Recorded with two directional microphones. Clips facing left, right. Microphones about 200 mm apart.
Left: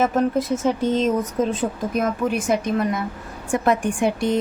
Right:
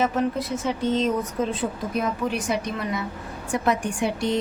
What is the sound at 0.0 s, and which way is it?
A woman's voice, 45° left (ahead or behind).